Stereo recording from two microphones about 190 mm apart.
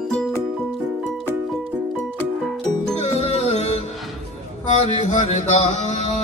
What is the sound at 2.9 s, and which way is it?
Music, 35° left (ahead or behind).